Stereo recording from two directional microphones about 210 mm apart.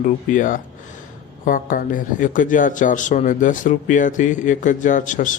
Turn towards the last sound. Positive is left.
turn(degrees=35)  # may be behind; listen again after turning